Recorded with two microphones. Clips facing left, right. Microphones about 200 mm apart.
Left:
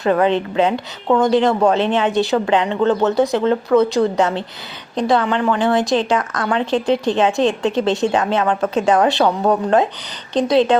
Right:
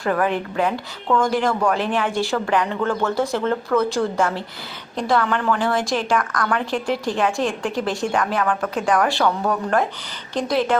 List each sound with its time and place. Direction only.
0.0 s a woman's voice: 20° left (ahead or behind)